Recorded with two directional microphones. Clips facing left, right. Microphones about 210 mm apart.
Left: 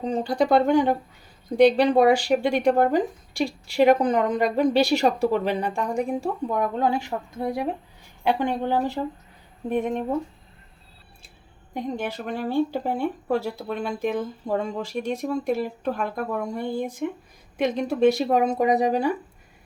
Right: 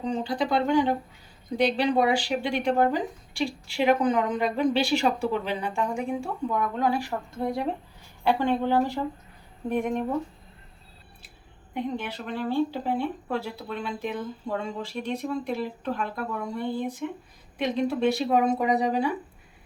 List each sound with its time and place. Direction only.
0.0 s speech: 45° left (ahead or behind)
7.3 s speech: 10° left (ahead or behind)
11.7 s speech: 45° left (ahead or behind)